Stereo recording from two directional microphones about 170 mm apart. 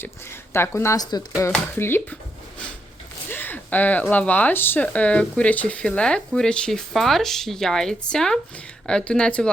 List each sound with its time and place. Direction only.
0.0 s speech: 15° left (ahead or behind)
3.2 s speech: 10° left (ahead or behind)